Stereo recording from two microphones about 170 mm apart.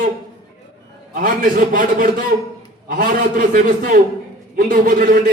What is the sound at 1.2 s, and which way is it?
A man's voice, 50° right (ahead or behind).